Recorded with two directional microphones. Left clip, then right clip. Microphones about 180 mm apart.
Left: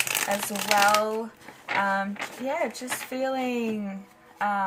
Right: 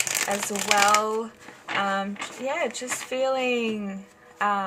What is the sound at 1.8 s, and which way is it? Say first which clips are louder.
Speech: even; 30° right (ahead or behind).